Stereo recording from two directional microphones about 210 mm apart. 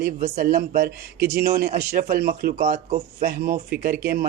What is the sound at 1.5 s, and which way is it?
Speech, 40° right (ahead or behind).